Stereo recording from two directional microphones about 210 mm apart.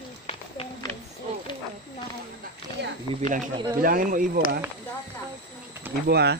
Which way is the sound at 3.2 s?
40° right (ahead or behind).